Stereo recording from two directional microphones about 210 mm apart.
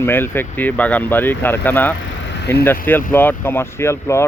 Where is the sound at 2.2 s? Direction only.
55° left (ahead or behind).